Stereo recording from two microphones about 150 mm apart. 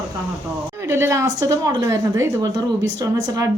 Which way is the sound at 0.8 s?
15° right (ahead or behind).